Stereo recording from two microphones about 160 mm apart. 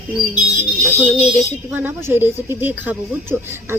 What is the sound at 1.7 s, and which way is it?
Speech, 10° right (ahead or behind).